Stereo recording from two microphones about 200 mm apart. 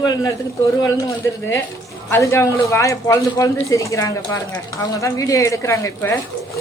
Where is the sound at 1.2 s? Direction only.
15° left (ahead or behind).